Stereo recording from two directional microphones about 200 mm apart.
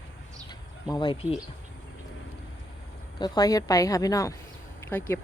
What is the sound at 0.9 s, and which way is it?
Speech, 25° left (ahead or behind).